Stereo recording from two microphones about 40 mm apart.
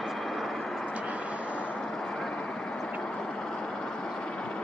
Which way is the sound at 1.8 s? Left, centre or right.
Centre.